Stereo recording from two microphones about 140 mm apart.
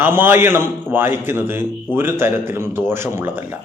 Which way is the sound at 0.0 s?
15° right (ahead or behind).